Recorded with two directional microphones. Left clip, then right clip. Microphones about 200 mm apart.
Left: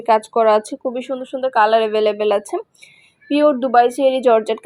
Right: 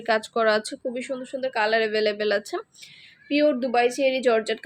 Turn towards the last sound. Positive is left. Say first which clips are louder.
# left 7 dB
turn(degrees=15)  # may be behind; listen again after turning